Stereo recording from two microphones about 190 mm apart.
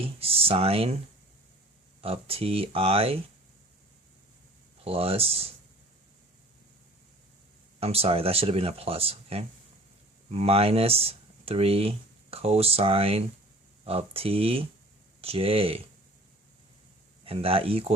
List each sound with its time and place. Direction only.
0.0 s speech: 30° right (ahead or behind)
2.0 s speech: 30° right (ahead or behind)
4.8 s speech: 30° right (ahead or behind)
7.8 s speech: 30° right (ahead or behind)
17.2 s speech: 30° right (ahead or behind)